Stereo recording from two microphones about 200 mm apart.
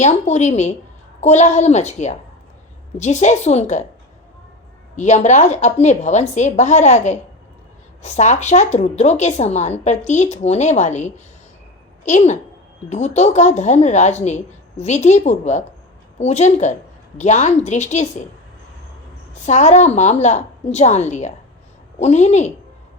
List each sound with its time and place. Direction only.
0.0 s a woman's voice: 35° left (ahead or behind)
4.9 s a woman's voice: 35° left (ahead or behind)
19.5 s a woman's voice: 35° left (ahead or behind)